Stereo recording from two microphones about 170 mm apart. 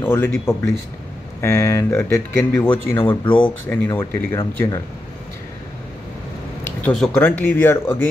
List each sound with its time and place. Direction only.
0.0 s speech: 10° left (ahead or behind)
3.3 s speech: 30° left (ahead or behind)
3.6 s speech: 10° left (ahead or behind)
6.8 s speech: 5° left (ahead or behind)